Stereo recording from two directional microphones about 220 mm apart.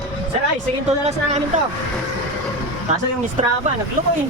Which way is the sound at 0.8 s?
30° right (ahead or behind).